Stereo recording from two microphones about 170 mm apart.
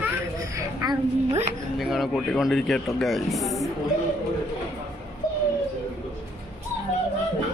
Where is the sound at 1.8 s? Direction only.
Centre (ahead or behind).